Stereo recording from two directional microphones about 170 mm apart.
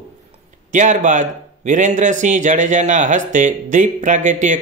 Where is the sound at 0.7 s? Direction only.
45° right (ahead or behind).